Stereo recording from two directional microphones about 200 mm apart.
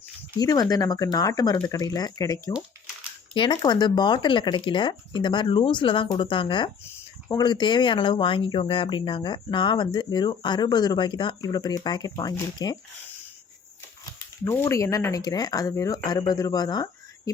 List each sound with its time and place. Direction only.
0.3 s speech: 20° left (ahead or behind)
14.0 s speech: 15° left (ahead or behind)